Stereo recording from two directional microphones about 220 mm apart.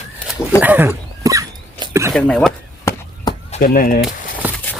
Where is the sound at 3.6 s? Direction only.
40° left (ahead or behind).